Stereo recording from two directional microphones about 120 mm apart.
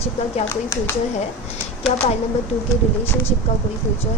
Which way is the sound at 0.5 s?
25° left (ahead or behind).